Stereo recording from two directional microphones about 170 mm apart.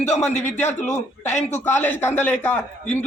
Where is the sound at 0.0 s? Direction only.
45° left (ahead or behind).